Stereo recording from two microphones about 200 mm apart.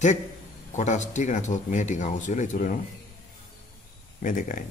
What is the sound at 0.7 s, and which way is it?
Speech, 35° left (ahead or behind).